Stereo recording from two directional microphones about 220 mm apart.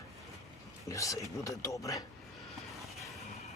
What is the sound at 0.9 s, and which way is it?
Speech, 15° left (ahead or behind).